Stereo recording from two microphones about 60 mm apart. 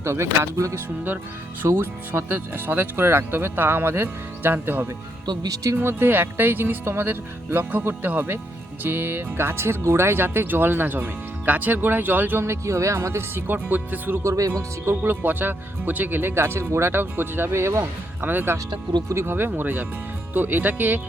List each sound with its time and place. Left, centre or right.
0.0 s speech: right
1.6 s speech: right
12.5 s speech: right
13.3 s speech: right
14.3 s speech: right
14.8 s speech: right
18.2 s speech: right